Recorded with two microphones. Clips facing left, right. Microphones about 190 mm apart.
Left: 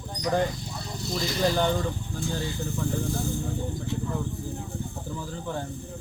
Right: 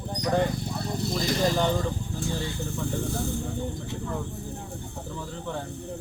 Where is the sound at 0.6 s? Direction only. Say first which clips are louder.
Right 5 dB; 55° right (ahead or behind).